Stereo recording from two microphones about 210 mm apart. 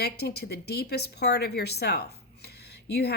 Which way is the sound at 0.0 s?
50° left (ahead or behind).